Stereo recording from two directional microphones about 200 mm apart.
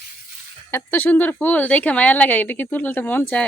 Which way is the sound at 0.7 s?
10° left (ahead or behind).